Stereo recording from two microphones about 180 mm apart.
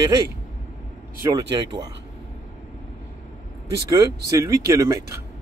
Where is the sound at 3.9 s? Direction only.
15° right (ahead or behind).